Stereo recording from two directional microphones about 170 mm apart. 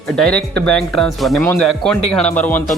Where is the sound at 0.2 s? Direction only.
5° left (ahead or behind).